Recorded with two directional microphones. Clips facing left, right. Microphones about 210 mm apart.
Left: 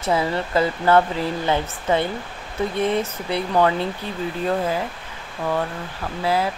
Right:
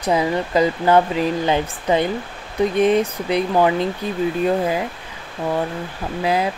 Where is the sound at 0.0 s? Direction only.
15° right (ahead or behind).